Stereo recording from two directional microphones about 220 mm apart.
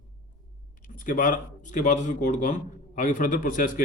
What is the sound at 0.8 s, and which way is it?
Speech, 40° left (ahead or behind).